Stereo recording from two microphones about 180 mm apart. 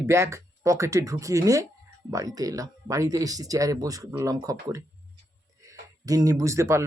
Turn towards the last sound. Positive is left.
turn(degrees=-15)  # may be behind; listen again after turning